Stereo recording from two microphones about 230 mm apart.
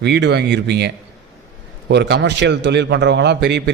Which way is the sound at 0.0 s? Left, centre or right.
Right.